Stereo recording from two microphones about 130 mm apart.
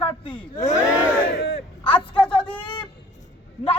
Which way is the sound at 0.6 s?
25° left (ahead or behind).